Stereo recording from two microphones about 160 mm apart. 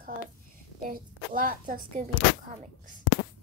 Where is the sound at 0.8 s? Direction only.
60° right (ahead or behind).